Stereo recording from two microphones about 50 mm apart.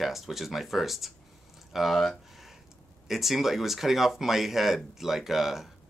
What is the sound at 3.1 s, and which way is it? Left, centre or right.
Speech, centre.